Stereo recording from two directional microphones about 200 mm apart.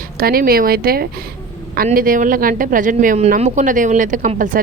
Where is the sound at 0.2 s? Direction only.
50° right (ahead or behind).